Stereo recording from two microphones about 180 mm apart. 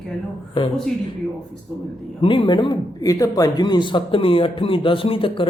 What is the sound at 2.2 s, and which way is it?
A man's voice, 30° left (ahead or behind).